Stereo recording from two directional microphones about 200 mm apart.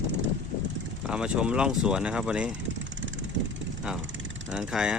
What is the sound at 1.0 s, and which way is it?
Speech, 5° right (ahead or behind).